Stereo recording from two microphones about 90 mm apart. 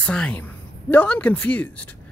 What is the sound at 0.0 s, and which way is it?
Speech, 10° left (ahead or behind).